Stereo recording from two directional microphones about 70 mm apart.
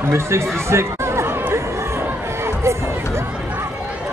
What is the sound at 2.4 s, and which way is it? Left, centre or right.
Crowd, right.